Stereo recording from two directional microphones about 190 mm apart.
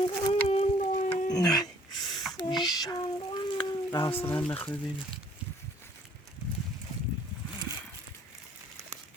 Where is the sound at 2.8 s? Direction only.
20° left (ahead or behind).